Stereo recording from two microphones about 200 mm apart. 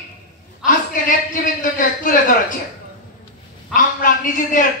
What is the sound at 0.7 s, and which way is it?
A man's voice, 40° left (ahead or behind).